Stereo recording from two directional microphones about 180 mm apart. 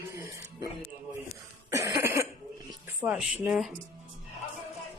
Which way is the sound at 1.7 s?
15° right (ahead or behind).